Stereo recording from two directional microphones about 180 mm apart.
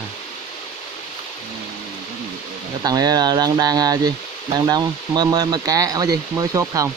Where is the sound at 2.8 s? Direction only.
20° right (ahead or behind).